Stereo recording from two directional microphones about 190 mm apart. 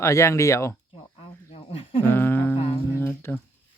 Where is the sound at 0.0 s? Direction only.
15° left (ahead or behind).